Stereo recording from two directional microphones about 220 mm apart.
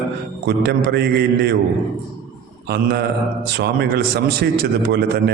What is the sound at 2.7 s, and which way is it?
A man's voice, 45° right (ahead or behind).